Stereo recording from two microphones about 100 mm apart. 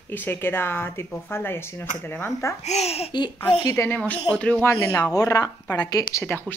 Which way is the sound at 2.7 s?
90° left.